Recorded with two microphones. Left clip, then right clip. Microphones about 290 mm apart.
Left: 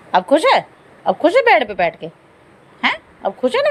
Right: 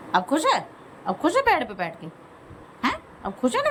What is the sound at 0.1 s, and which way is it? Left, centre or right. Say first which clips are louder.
A woman's voice: left 8 dB; centre.